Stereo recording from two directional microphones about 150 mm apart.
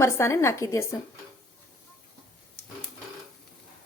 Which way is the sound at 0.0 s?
20° left (ahead or behind).